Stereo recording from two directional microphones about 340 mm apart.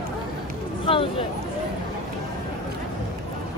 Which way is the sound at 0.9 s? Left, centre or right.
Centre.